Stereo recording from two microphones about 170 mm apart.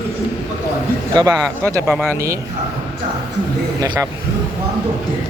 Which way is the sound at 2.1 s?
15° right (ahead or behind).